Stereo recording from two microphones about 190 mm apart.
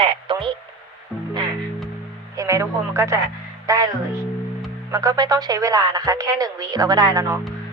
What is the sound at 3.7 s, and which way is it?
Music, 20° right (ahead or behind).